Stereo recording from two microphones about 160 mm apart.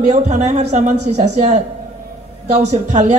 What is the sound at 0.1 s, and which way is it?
Speech, 45° right (ahead or behind).